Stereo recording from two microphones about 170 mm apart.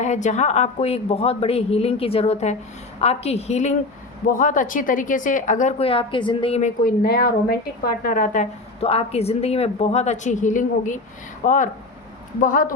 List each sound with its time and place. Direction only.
0.0 s a woman's voice: 45° left (ahead or behind)
5.8 s a woman's voice: 30° left (ahead or behind); by 12.6 s 50° left (ahead or behind)